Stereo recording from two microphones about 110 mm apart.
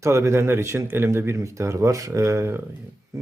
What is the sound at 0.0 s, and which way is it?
Speech, 25° right (ahead or behind).